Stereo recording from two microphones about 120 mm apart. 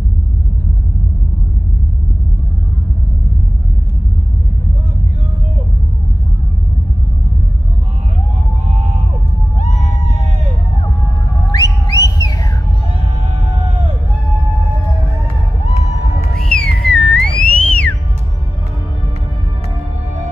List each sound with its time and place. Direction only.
11.5 s whistling: 30° left (ahead or behind)
16.3 s music: 5° left (ahead or behind)